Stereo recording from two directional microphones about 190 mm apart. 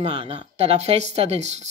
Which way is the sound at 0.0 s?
30° right (ahead or behind).